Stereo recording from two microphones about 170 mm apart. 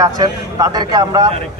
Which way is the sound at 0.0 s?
20° right (ahead or behind).